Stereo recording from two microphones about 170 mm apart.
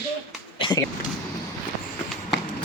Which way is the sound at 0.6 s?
25° left (ahead or behind).